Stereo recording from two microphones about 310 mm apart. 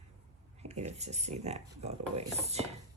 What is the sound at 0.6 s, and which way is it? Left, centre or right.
Speech, right.